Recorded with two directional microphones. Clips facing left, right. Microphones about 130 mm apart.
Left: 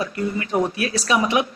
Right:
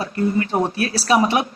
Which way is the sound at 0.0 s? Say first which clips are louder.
Right 4 dB; 30° right (ahead or behind).